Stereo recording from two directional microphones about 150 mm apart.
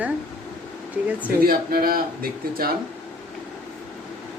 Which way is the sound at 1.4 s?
85° right.